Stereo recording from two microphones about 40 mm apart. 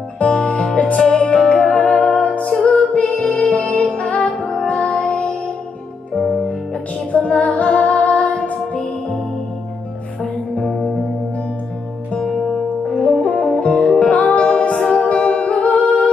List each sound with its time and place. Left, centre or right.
0.2 s music: left
2.6 s female singing: left
3.9 s music: left
4.6 s music: left
7.1 s music: left
12.9 s music: left